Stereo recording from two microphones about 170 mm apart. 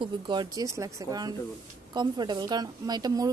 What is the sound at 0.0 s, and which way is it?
A woman's voice, 25° right (ahead or behind).